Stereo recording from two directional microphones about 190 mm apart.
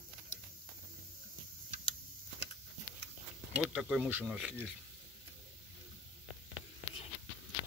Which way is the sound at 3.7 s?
5° right (ahead or behind).